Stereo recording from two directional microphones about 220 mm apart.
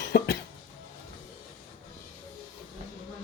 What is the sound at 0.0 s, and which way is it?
Cough, 55° left (ahead or behind).